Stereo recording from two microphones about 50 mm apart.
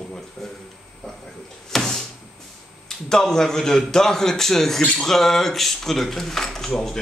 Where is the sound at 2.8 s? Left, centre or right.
Centre.